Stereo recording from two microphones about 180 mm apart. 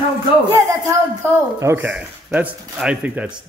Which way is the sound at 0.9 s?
15° right (ahead or behind).